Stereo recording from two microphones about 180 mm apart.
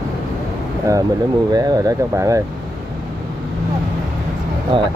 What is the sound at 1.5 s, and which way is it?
Speech, 20° right (ahead or behind).